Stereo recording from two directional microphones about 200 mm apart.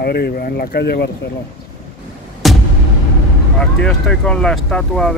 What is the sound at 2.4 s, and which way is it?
Music, centre (ahead or behind).